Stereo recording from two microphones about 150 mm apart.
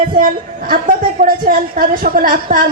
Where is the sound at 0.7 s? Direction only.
70° right (ahead or behind).